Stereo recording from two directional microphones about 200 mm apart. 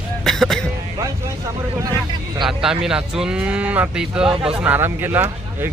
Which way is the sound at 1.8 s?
20° right (ahead or behind).